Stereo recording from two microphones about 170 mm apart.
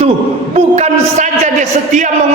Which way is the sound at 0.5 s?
40° right (ahead or behind).